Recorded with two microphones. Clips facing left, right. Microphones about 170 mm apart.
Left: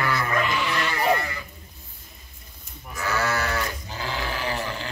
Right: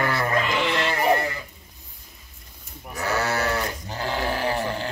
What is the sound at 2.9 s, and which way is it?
Sheep, 35° right (ahead or behind).